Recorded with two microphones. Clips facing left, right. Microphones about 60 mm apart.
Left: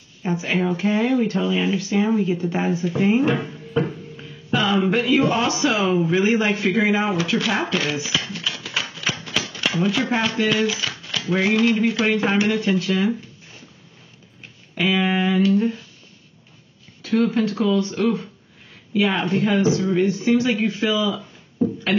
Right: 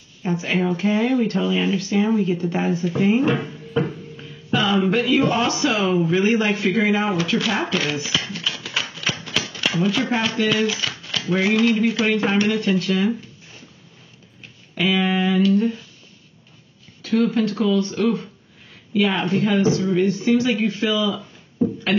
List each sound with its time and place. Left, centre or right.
0.2 s speech: centre
4.5 s speech: centre
8.2 s typewriter: centre
10.6 s speech: centre
14.8 s speech: centre
17.1 s speech: centre